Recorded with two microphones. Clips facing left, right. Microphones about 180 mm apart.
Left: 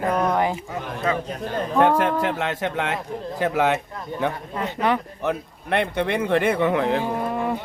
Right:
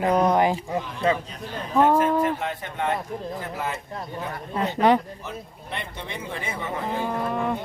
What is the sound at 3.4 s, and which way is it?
Speech, 80° left.